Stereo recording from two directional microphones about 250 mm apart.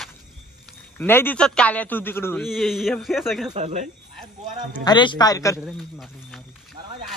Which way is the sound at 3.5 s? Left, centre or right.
Right.